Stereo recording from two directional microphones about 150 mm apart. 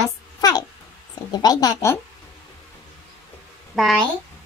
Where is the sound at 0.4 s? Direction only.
25° left (ahead or behind).